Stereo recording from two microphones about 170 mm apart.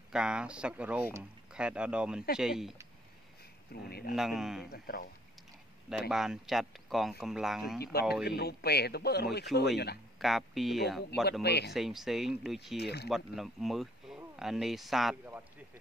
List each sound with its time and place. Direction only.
0.1 s speech: 5° right (ahead or behind)
3.7 s speech: 65° left (ahead or behind)
4.1 s speech: centre (ahead or behind)
4.6 s speech: 65° left (ahead or behind)
5.9 s speech: 5° right (ahead or behind)
7.8 s speech: 65° left (ahead or behind)
10.2 s speech: centre (ahead or behind)
11.4 s speech: 75° left (ahead or behind)
11.7 s speech: centre (ahead or behind)
12.7 s speech: 75° left (ahead or behind)
13.1 s speech: centre (ahead or behind)